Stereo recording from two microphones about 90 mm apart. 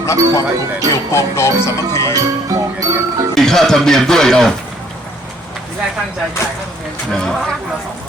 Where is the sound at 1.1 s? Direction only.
30° left (ahead or behind).